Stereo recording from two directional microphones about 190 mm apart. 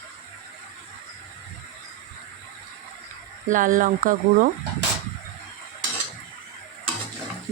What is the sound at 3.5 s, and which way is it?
Speech, 45° right (ahead or behind).